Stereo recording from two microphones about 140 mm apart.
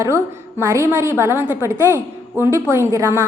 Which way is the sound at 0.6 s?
20° right (ahead or behind).